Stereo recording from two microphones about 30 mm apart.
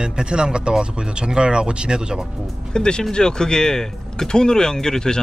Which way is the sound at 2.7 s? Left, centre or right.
Left.